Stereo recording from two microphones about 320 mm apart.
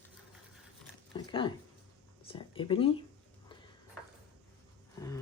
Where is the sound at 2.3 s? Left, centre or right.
Centre.